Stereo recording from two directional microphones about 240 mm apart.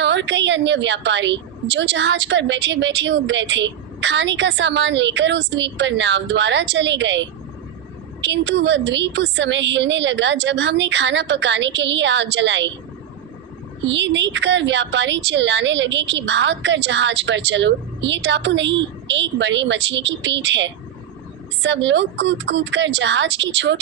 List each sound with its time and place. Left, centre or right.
0.0 s a woman's voice: right
13.8 s a woman's voice: right